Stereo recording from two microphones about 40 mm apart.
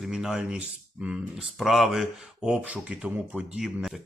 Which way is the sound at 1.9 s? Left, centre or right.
Centre.